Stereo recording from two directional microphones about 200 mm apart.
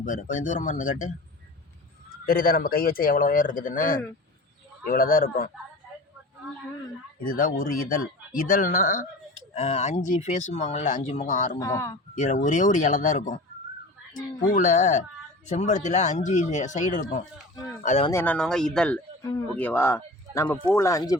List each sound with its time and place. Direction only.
0.0 s speech: 40° left (ahead or behind)
2.2 s speech: 45° left (ahead or behind)
7.3 s speech: 45° left (ahead or behind)
11.6 s speech: 15° left (ahead or behind)
12.1 s speech: 40° left (ahead or behind)
18.1 s speech: 10° left (ahead or behind)